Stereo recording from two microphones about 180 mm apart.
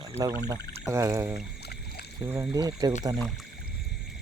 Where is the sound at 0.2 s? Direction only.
20° right (ahead or behind).